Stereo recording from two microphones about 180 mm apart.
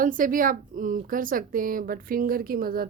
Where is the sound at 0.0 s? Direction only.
50° right (ahead or behind).